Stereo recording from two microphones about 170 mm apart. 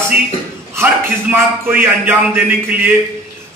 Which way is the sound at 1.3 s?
10° right (ahead or behind).